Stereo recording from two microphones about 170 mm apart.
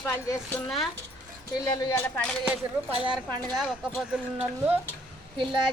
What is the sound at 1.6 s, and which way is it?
Speech, 20° left (ahead or behind).